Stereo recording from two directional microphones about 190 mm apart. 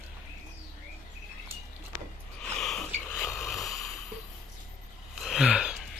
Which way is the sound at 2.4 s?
Centre (ahead or behind).